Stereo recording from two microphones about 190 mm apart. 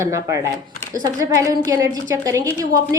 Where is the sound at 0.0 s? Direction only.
15° right (ahead or behind).